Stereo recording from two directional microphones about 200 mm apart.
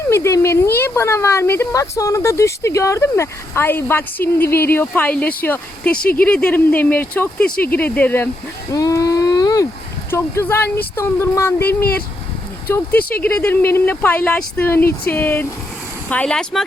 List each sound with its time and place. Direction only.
0.1 s a woman's voice: 15° left (ahead or behind)
8.7 s a sound: 15° left (ahead or behind)
10.1 s a woman's voice: 10° left (ahead or behind)
12.6 s a woman's voice: 10° left (ahead or behind)